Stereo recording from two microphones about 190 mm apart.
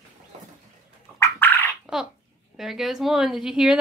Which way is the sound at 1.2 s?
10° left (ahead or behind).